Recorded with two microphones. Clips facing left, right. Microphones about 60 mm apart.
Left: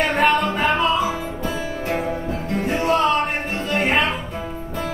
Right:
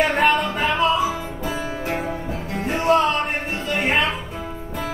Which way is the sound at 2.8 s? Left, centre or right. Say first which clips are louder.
Right 1 dB; centre.